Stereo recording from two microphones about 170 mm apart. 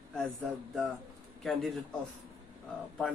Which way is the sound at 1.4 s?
Centre (ahead or behind).